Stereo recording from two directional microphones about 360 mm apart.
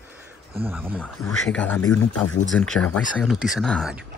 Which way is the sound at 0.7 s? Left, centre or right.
Centre.